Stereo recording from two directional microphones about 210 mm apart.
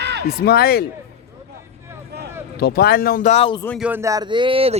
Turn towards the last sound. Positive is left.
turn(degrees=-25)  # may be behind; listen again after turning